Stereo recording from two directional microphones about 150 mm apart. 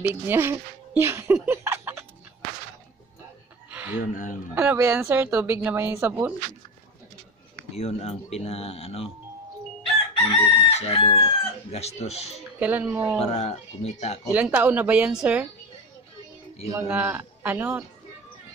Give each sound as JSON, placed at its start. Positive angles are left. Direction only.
{"t": 0.0, "sound": "speech", "side_deg": -15}
{"t": 3.7, "sound": "chicken", "side_deg": -10}
{"t": 4.0, "sound": "speech", "side_deg": 60}
{"t": 4.6, "sound": "speech", "side_deg": -20}
{"t": 7.7, "sound": "speech", "side_deg": 45}
{"t": 10.3, "sound": "speech", "side_deg": 40}
{"t": 12.5, "sound": "speech", "side_deg": -10}
{"t": 13.2, "sound": "speech", "side_deg": 45}
{"t": 14.3, "sound": "speech", "side_deg": -10}
{"t": 16.7, "sound": "speech", "side_deg": -15}